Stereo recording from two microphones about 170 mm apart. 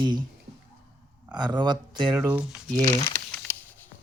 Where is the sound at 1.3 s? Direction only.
25° right (ahead or behind).